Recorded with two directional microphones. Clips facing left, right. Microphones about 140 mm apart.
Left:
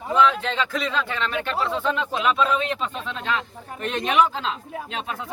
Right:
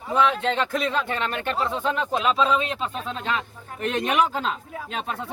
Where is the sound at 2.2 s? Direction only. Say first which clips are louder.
Left 1 dB; 30° right (ahead or behind).